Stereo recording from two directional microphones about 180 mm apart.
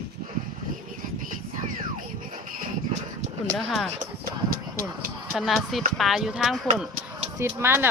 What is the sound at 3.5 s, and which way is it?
Speech, centre (ahead or behind).